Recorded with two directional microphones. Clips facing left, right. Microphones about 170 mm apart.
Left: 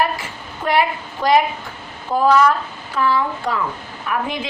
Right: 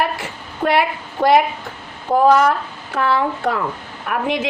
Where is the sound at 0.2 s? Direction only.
65° right (ahead or behind).